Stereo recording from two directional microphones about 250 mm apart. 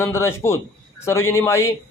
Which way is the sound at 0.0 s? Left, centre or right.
Centre.